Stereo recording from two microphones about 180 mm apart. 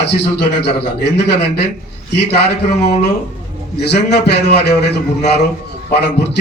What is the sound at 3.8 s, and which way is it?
A man's voice, 65° left (ahead or behind).